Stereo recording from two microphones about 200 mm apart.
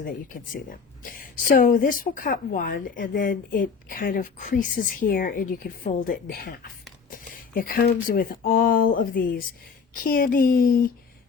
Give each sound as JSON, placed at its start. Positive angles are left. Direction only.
{"t": 0.0, "sound": "speech", "side_deg": 45}